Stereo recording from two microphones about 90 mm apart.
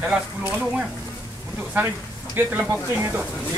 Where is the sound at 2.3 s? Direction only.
25° right (ahead or behind).